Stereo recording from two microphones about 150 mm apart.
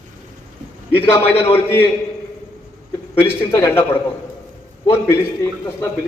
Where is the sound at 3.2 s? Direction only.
15° left (ahead or behind).